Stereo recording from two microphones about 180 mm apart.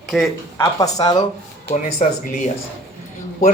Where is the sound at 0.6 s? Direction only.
20° left (ahead or behind).